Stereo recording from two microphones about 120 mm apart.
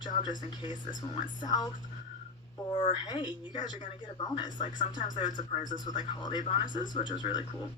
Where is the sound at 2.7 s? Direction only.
40° left (ahead or behind).